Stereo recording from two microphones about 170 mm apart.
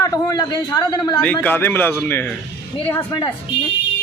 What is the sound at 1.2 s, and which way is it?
A man's voice, 10° left (ahead or behind).